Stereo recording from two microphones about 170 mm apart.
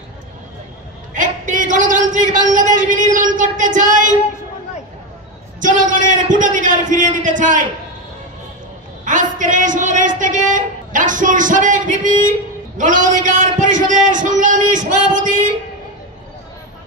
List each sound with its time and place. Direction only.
1.1 s a sound: 50° right (ahead or behind)
5.6 s a man's voice: 50° right (ahead or behind)
9.0 s a woman's voice: 50° right (ahead or behind)